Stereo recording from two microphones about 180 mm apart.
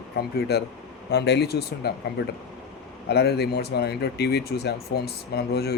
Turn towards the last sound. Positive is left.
turn(degrees=60)  # may be behind; listen again after turning